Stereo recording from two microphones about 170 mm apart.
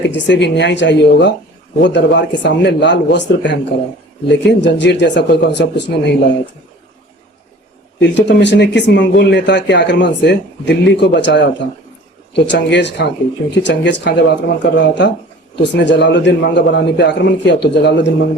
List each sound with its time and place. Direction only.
0.1 s speech: 90° left
7.9 s speech: 90° left